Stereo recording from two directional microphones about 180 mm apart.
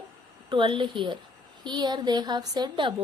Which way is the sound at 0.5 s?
25° right (ahead or behind).